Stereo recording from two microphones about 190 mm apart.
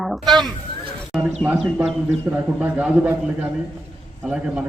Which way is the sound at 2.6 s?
5° right (ahead or behind).